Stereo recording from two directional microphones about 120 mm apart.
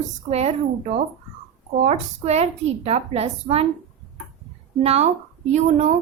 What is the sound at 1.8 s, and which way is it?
A woman's voice, 70° right (ahead or behind).